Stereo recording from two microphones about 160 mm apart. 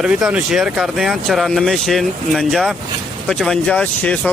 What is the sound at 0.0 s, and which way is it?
Speech, 5° right (ahead or behind).